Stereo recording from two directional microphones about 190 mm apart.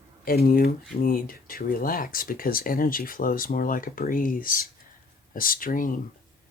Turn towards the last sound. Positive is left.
turn(degrees=45)  # may be behind; listen again after turning